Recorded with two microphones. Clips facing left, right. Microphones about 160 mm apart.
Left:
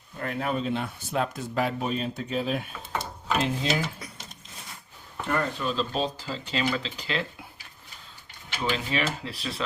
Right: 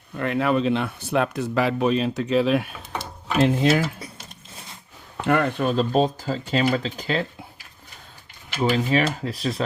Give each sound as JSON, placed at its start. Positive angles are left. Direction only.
{"t": 0.2, "sound": "speech", "side_deg": -85}
{"t": 3.0, "sound": "tick-tock", "side_deg": -65}
{"t": 5.2, "sound": "speech", "side_deg": -80}
{"t": 8.7, "sound": "speech", "side_deg": -45}